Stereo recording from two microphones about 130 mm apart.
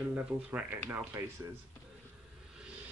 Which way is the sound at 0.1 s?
10° right (ahead or behind).